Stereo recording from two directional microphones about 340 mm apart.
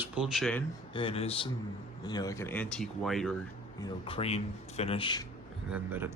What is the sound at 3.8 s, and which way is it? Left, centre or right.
Speech, centre.